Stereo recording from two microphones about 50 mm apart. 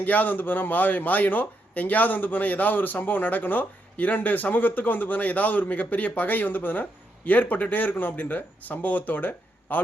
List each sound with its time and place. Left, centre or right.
0.0 s a man's voice: left